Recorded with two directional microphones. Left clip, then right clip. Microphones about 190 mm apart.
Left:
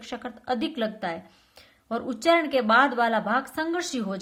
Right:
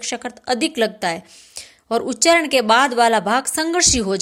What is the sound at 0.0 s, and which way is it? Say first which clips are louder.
A woman's voice: right 9 dB; 30° right (ahead or behind).